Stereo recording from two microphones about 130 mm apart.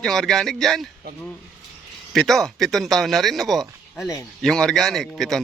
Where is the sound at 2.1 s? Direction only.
Centre (ahead or behind).